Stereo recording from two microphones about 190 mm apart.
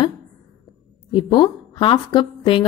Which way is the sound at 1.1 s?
25° left (ahead or behind).